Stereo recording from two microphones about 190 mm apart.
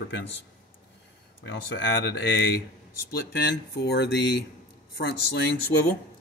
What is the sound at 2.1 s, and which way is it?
Speech, 60° left (ahead or behind).